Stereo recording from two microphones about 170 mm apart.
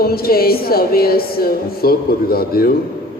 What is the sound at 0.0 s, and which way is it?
A woman's voice, 60° left (ahead or behind).